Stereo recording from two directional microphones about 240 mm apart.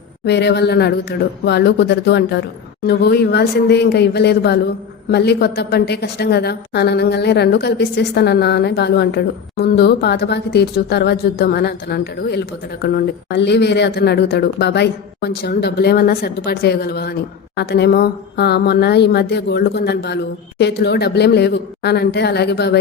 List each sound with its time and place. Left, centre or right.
0.3 s a woman's voice: left